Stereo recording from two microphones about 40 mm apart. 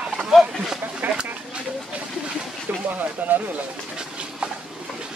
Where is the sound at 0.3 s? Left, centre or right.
Centre.